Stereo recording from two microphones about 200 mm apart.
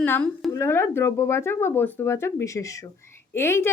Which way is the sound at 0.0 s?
5° left (ahead or behind).